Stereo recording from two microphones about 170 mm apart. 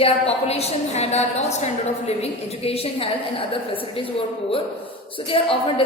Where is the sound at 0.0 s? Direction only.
35° left (ahead or behind).